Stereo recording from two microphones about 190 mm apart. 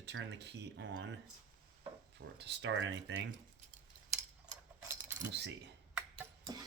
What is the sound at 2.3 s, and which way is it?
Speech, 65° right (ahead or behind).